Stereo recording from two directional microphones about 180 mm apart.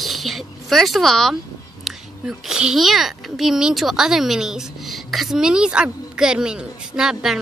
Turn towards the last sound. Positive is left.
turn(degrees=-5)  # may be behind; listen again after turning